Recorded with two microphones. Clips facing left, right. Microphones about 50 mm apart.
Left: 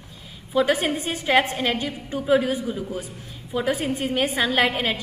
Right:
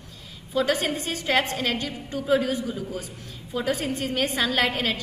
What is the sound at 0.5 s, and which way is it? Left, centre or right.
A woman's voice, centre.